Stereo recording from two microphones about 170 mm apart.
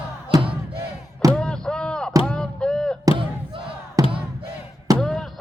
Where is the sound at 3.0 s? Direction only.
30° right (ahead or behind).